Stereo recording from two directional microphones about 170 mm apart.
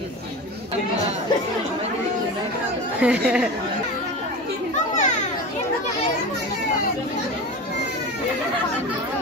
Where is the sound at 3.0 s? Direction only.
5° right (ahead or behind).